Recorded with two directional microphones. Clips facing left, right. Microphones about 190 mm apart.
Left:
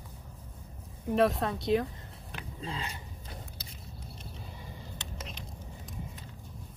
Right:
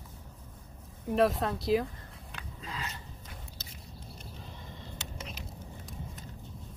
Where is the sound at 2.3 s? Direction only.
30° left (ahead or behind).